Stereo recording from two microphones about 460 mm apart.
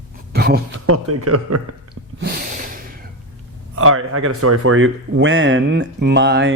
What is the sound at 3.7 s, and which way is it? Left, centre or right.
Speech, right.